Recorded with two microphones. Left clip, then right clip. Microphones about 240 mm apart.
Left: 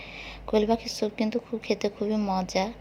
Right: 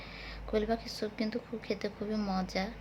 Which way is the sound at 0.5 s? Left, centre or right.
Left.